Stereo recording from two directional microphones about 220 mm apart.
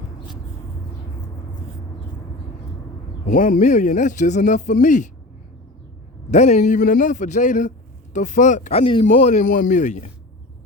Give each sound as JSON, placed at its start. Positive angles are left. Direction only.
{"t": 3.2, "sound": "speech", "side_deg": 40}
{"t": 6.3, "sound": "speech", "side_deg": 30}
{"t": 9.0, "sound": "speech", "side_deg": 35}